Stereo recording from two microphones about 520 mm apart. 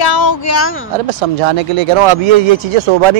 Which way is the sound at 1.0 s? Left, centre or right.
Right.